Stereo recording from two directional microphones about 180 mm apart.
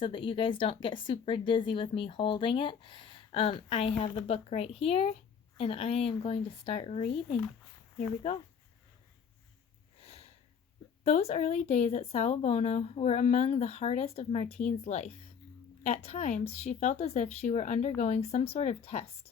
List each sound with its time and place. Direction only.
0.0 s speech: 30° left (ahead or behind)
8.2 s speech: 35° left (ahead or behind)
10.0 s sniff: 35° left (ahead or behind)
11.0 s speech: 35° left (ahead or behind)